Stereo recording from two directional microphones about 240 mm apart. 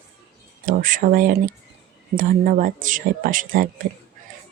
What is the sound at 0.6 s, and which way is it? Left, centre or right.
Speech, right.